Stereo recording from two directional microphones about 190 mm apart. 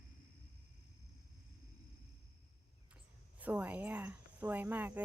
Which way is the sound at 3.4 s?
10° right (ahead or behind).